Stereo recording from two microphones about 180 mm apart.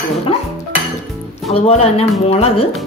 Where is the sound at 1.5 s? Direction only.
35° left (ahead or behind).